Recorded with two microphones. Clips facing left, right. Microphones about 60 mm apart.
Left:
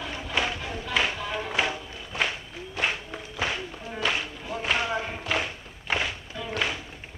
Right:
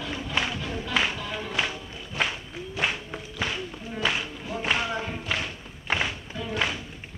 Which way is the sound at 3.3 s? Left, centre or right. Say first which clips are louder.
Left 1 dB; centre.